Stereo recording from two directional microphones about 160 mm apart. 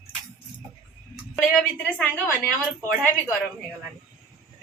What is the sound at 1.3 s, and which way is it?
A woman's voice, centre (ahead or behind).